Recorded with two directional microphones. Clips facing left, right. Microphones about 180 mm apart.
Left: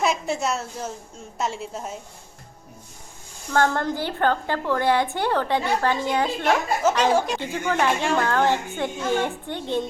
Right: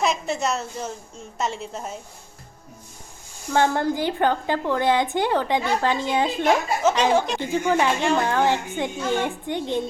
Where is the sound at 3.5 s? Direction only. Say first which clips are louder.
Right 1 dB; 10° right (ahead or behind).